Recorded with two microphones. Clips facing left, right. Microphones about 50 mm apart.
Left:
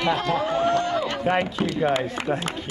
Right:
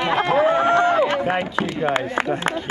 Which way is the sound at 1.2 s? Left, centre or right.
Centre.